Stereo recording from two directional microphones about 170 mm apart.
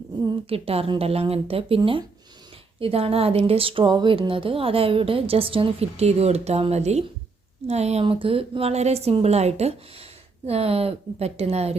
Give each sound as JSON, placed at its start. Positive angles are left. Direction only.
{"t": 0.4, "sound": "speech", "side_deg": -35}